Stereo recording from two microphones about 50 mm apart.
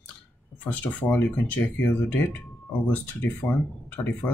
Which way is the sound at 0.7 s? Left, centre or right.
Left.